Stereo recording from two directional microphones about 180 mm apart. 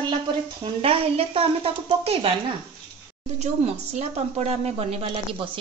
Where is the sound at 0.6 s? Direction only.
30° right (ahead or behind).